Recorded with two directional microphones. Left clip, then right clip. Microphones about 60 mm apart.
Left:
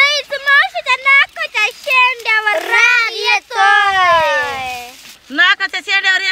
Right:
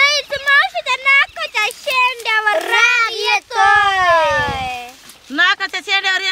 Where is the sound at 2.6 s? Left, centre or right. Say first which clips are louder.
Left 2 dB; centre.